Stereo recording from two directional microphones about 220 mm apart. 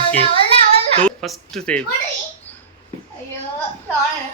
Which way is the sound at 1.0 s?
Centre (ahead or behind).